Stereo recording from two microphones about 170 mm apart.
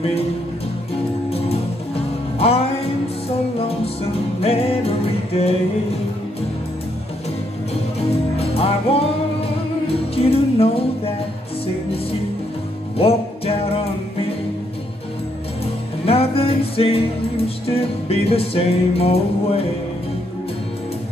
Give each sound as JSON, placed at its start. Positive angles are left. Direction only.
{"t": 2.3, "sound": "music", "side_deg": 35}
{"t": 4.4, "sound": "music", "side_deg": 35}
{"t": 8.4, "sound": "music", "side_deg": 35}
{"t": 10.1, "sound": "music", "side_deg": 35}
{"t": 16.1, "sound": "music", "side_deg": 35}